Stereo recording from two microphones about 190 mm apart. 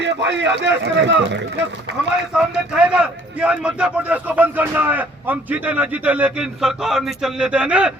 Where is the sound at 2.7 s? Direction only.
5° right (ahead or behind).